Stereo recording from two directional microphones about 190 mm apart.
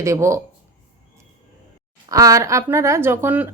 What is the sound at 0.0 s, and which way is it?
Speech, 15° right (ahead or behind).